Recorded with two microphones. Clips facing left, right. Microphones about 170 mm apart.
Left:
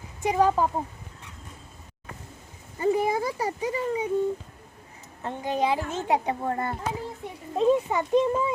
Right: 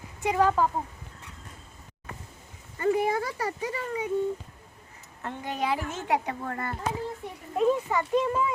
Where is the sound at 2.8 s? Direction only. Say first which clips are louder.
Left 1 dB; 15° left (ahead or behind).